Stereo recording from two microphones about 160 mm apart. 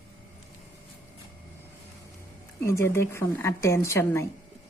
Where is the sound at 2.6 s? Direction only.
15° left (ahead or behind).